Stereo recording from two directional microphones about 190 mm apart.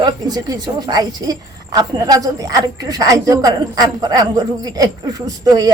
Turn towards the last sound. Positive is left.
turn(degrees=-20)  # may be behind; listen again after turning